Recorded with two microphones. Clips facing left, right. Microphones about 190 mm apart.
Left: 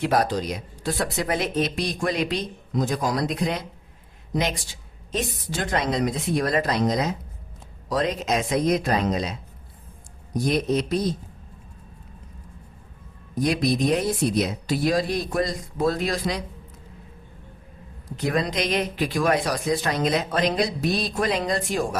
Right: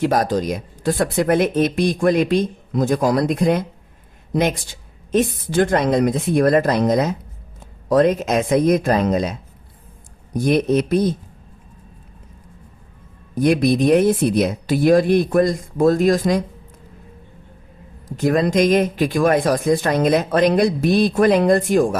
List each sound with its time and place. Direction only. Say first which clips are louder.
0.0 s speech: right 4 dB; 45° right (ahead or behind)
13.3 s speech: right 7 dB; 55° right (ahead or behind)
18.2 s speech: right 8 dB; 45° right (ahead or behind)